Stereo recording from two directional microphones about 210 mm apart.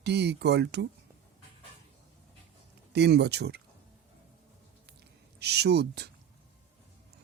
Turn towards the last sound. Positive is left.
turn(degrees=-50)  # may be behind; listen again after turning